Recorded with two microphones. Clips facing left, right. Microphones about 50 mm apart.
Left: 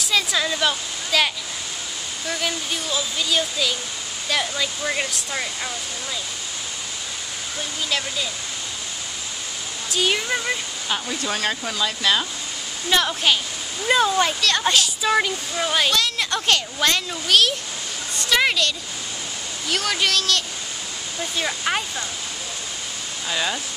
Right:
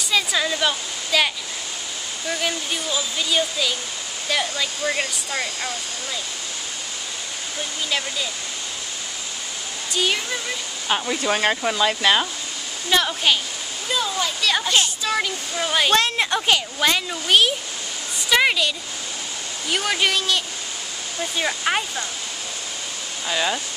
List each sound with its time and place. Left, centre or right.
0.0 s speech: centre
9.8 s speech: centre
10.9 s speech: right
12.9 s speech: centre
13.8 s speech: left
15.0 s speech: centre
15.9 s speech: right
16.3 s a woman's voice: centre
19.7 s speech: centre
23.2 s speech: centre